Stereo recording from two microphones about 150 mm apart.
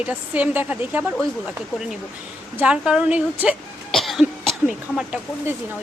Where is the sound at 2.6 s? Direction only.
5° right (ahead or behind).